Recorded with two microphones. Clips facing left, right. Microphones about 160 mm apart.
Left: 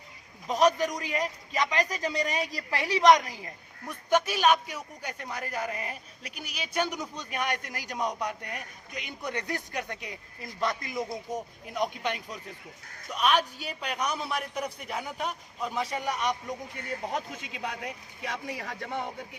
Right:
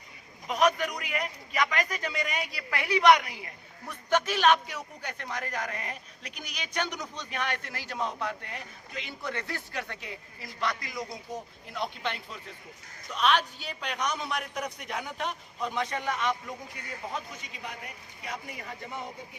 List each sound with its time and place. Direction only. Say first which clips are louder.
0.4 s a man's voice: left 2 dB; 35° left (ahead or behind)
3.8 s a man's voice: left 2 dB; 10° left (ahead or behind)
17.2 s a man's voice: left 4 dB; 90° left; by 19.0 s 70° left (ahead or behind)